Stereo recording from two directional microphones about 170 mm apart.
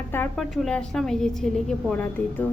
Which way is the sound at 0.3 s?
Centre (ahead or behind).